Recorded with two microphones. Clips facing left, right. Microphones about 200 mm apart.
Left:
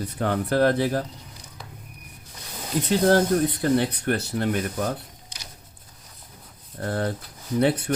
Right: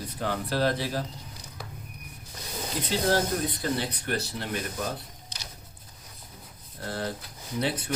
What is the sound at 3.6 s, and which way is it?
Speech, 55° left (ahead or behind).